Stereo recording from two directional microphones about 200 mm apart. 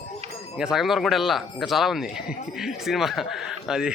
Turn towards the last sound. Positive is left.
turn(degrees=-5)  # may be behind; listen again after turning